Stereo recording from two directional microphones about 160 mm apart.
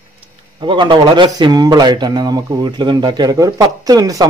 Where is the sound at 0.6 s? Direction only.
30° right (ahead or behind).